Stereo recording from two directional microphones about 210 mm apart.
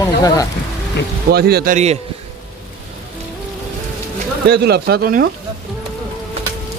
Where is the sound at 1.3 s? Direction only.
50° right (ahead or behind).